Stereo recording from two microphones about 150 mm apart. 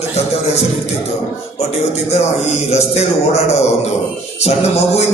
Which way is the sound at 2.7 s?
45° left (ahead or behind).